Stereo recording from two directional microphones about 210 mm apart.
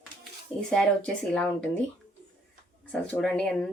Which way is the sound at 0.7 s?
5° left (ahead or behind).